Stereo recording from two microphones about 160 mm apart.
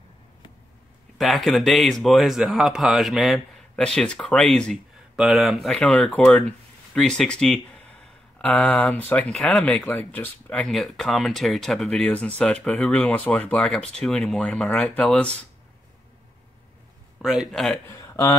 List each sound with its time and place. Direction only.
1.1 s speech: centre (ahead or behind)
17.2 s speech: centre (ahead or behind)
17.8 s a sound: 20° left (ahead or behind)